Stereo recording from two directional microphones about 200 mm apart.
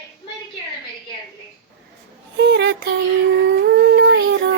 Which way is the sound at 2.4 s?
60° right (ahead or behind).